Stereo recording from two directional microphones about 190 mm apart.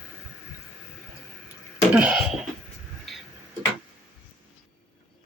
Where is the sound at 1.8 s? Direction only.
5° right (ahead or behind).